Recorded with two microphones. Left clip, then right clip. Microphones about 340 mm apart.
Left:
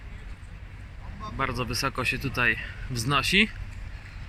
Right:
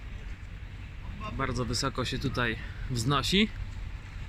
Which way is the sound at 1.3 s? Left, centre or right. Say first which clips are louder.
Left 4 dB; centre.